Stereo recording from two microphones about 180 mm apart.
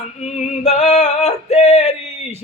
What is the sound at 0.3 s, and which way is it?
Male singing, 40° left (ahead or behind).